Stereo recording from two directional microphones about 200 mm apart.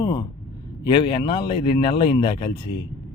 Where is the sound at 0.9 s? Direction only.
25° left (ahead or behind).